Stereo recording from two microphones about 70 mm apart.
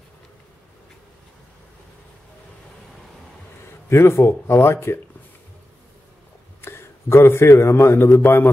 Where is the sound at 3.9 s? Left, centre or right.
Left.